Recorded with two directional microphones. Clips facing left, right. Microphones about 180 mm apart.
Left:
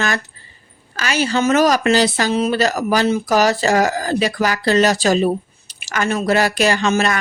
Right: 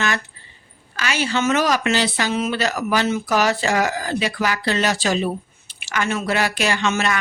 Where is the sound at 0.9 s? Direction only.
40° left (ahead or behind).